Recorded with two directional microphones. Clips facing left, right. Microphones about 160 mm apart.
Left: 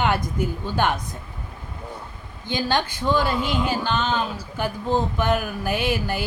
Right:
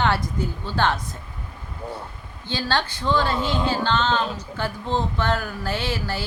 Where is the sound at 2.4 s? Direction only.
15° left (ahead or behind).